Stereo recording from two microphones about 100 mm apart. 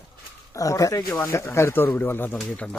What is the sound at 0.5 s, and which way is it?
Speech, 35° left (ahead or behind).